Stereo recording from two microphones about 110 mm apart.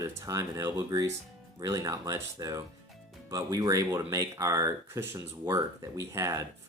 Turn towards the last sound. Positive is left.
turn(degrees=-25)  # may be behind; listen again after turning